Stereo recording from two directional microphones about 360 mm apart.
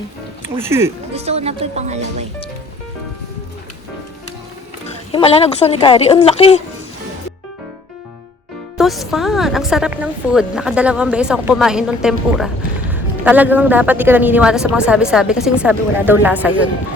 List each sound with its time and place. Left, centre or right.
0.4 s speech: centre
1.1 s speech: centre
5.1 s a woman's voice: centre
8.8 s a woman's voice: centre